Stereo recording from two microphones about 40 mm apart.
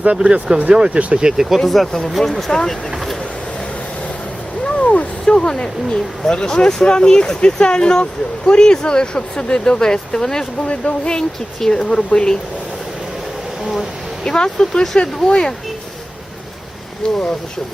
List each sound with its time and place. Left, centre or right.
0.5 s speech: centre
0.9 s speech: right
1.4 s speech: centre
2.5 s speech: centre
4.6 s a sound: left
5.2 s speech: centre
10.7 s speech: left
14.3 s speech: left
17.0 s speech: left